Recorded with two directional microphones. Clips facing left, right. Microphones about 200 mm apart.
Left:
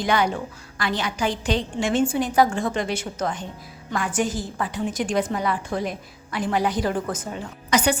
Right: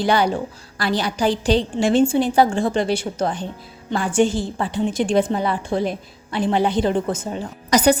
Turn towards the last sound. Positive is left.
turn(degrees=-40)  # may be behind; listen again after turning